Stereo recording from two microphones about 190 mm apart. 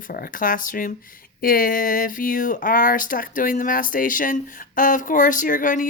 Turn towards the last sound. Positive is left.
turn(degrees=45)  # may be behind; listen again after turning